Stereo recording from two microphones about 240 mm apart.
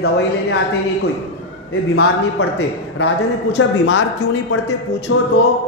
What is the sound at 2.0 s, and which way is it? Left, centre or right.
A man's voice, left.